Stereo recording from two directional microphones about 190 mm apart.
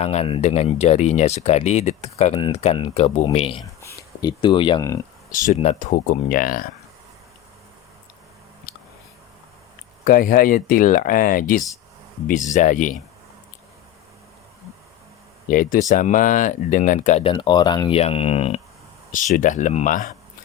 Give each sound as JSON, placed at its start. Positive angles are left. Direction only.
{"t": 0.0, "sound": "speech", "side_deg": 35}
{"t": 5.5, "sound": "speech", "side_deg": 35}
{"t": 5.9, "sound": "speech", "side_deg": 50}
{"t": 8.7, "sound": "a sound", "side_deg": 55}
{"t": 10.0, "sound": "speech", "side_deg": 45}
{"t": 15.4, "sound": "speech", "side_deg": 45}